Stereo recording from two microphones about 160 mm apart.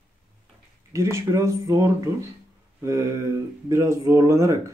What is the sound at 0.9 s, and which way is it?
Speech, 20° right (ahead or behind).